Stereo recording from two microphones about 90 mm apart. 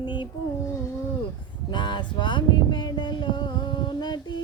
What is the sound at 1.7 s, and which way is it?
Music, 60° left (ahead or behind).